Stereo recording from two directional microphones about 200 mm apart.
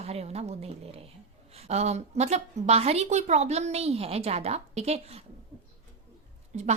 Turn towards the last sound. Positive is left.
turn(degrees=-35)  # may be behind; listen again after turning